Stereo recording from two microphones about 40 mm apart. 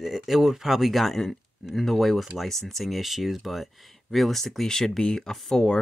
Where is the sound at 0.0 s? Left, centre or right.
Centre.